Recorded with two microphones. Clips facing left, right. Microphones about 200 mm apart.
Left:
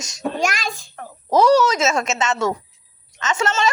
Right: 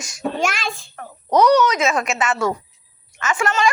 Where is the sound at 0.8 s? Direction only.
30° left (ahead or behind).